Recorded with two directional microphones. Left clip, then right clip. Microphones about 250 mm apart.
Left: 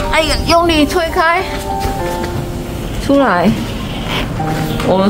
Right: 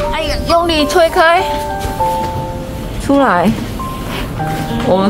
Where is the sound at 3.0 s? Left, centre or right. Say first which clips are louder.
Even; centre.